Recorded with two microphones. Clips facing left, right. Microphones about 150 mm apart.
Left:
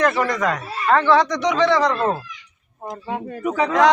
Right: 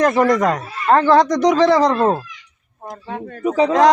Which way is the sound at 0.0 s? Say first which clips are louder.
Right 5 dB; 40° right (ahead or behind).